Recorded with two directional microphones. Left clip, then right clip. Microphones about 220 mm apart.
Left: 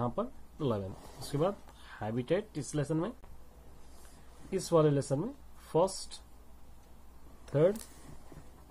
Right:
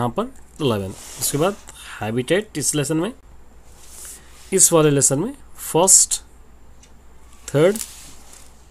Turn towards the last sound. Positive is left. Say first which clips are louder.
# right 12 dB
turn(degrees=-25)  # may be behind; listen again after turning